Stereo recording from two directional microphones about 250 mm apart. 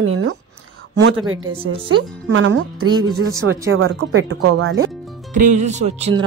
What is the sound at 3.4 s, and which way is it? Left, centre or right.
Speech, right.